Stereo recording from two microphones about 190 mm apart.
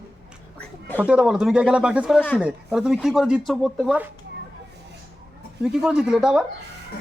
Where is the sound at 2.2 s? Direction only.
5° left (ahead or behind).